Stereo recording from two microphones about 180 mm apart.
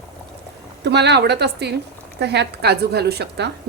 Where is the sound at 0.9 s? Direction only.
70° right (ahead or behind).